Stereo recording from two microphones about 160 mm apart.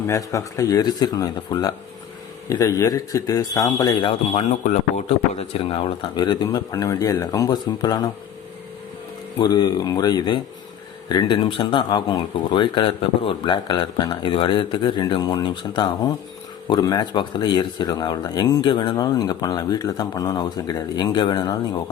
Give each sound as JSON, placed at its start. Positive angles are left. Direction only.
{"t": 0.1, "sound": "speech", "side_deg": 20}
{"t": 4.4, "sound": "speech", "side_deg": 45}
{"t": 9.4, "sound": "speech", "side_deg": 25}